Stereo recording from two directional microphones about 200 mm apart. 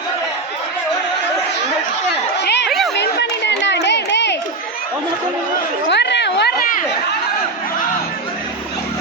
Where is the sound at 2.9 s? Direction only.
60° left (ahead or behind).